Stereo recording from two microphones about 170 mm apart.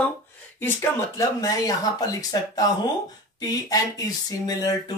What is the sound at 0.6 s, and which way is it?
Speech, 15° left (ahead or behind).